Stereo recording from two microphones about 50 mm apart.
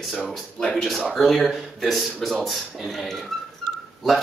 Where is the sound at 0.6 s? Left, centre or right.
Centre.